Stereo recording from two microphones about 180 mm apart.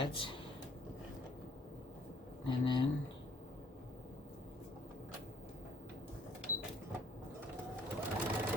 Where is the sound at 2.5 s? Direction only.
25° left (ahead or behind).